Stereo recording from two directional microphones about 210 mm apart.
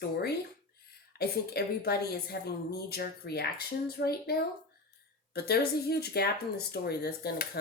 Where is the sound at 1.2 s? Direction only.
50° left (ahead or behind).